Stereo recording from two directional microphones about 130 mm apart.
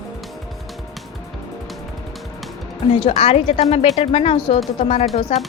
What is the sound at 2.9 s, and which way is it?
A woman's voice, 50° left (ahead or behind).